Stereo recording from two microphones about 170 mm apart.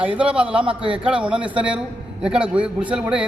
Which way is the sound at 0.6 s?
30° right (ahead or behind).